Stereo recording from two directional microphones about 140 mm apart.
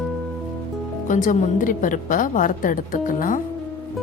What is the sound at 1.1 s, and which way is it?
A woman's voice, 65° left (ahead or behind).